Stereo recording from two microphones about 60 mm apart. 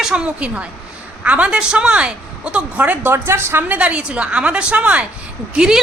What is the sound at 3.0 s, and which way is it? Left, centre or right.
Speech, right.